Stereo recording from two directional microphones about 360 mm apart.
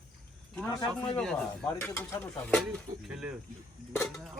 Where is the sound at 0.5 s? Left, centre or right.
Centre.